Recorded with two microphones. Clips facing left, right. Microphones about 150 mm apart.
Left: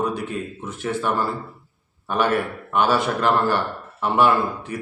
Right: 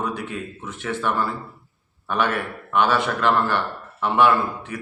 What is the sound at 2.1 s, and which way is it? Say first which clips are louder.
Speech: left 2 dB; 40° left (ahead or behind).